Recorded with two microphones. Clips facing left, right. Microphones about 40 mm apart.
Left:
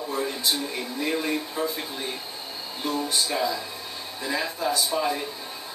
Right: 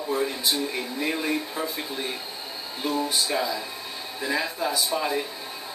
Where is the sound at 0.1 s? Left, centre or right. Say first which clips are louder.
Right 2 dB; centre.